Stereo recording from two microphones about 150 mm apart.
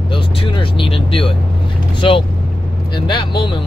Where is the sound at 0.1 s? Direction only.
35° left (ahead or behind).